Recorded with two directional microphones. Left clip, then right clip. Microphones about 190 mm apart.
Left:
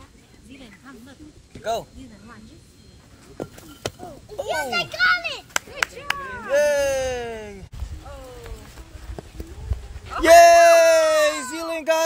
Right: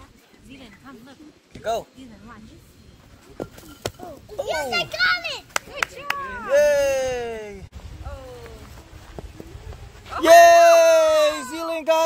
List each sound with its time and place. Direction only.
0.5 s a sound: 35° right (ahead or behind)
1.6 s speech: centre (ahead or behind)
3.4 s speech: centre (ahead or behind)
3.8 s a sound: 5° left (ahead or behind)
4.5 s a child's voice: 60° right (ahead or behind)
6.0 s speech: 35° right (ahead or behind)
6.5 s speech: 10° right (ahead or behind)
10.1 s bleat: 5° right (ahead or behind)
11.5 s a sound: centre (ahead or behind)